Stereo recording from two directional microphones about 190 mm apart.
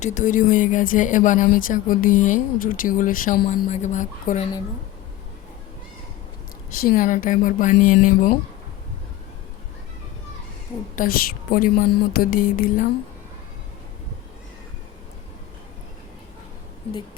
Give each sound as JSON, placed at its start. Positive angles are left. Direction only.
{"t": 0.0, "sound": "speech", "side_deg": 40}
{"t": 6.7, "sound": "speech", "side_deg": 45}
{"t": 11.0, "sound": "speech", "side_deg": 45}